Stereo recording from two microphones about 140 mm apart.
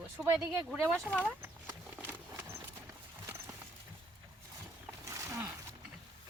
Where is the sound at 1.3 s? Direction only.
15° right (ahead or behind).